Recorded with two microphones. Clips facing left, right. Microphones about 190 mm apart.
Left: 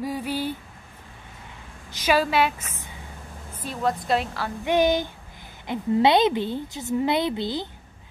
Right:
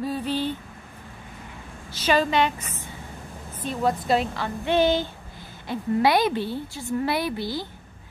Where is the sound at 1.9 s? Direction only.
10° left (ahead or behind).